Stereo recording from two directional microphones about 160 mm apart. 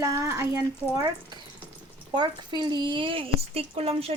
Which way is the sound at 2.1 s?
30° right (ahead or behind).